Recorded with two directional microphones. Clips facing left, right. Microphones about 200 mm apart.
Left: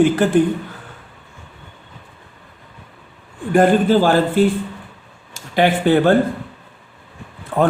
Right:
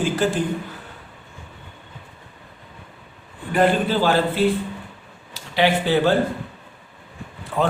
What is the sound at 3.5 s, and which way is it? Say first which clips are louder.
Speech: left 6 dB; 45° left (ahead or behind).